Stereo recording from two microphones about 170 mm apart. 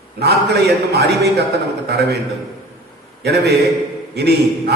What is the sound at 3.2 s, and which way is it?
A man's voice, 75° right (ahead or behind).